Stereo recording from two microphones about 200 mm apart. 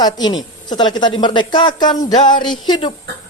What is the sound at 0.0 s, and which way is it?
Speech, 20° left (ahead or behind).